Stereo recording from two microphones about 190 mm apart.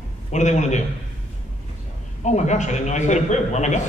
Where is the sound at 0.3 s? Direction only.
40° left (ahead or behind).